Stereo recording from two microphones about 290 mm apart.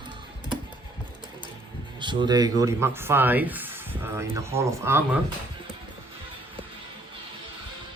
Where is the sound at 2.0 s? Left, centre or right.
Centre.